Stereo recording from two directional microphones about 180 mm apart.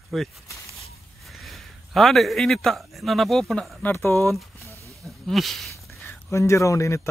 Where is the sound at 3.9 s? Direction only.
15° left (ahead or behind).